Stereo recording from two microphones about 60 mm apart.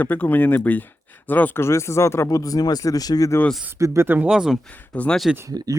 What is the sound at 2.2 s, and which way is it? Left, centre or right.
Speech, left.